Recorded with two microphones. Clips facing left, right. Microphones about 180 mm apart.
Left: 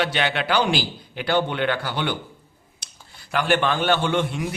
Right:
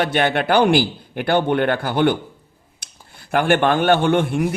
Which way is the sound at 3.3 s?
55° right (ahead or behind).